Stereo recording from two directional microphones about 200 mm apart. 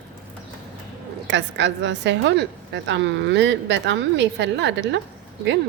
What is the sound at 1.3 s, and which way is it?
A woman's voice, 60° right (ahead or behind).